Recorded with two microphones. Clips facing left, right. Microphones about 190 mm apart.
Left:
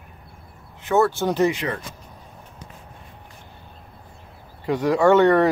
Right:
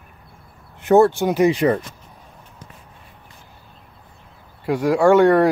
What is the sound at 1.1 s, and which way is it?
Speech, 15° right (ahead or behind).